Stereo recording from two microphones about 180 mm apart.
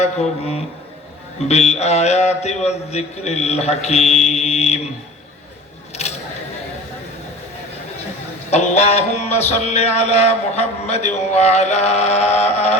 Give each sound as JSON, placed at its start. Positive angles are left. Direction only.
{"t": 0.0, "sound": "music", "side_deg": 35}
{"t": 5.9, "sound": "a sound", "side_deg": 35}
{"t": 8.4, "sound": "music", "side_deg": 35}